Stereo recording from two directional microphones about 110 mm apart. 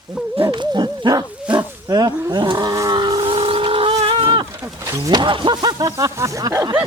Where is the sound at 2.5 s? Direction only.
35° right (ahead or behind); by 4.0 s 55° right (ahead or behind).